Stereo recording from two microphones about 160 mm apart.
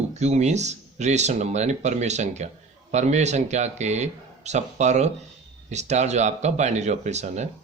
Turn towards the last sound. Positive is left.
turn(degrees=-45)  # may be behind; listen again after turning